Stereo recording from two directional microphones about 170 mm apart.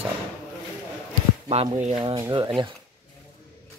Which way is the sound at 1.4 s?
35° right (ahead or behind).